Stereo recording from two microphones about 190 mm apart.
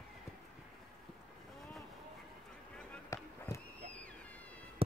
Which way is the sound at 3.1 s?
15° left (ahead or behind).